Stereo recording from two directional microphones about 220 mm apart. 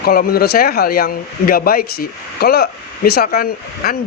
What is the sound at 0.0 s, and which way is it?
Speech, 45° left (ahead or behind).